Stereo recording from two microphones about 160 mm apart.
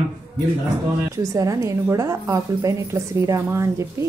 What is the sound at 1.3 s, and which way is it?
A woman's voice, 20° right (ahead or behind).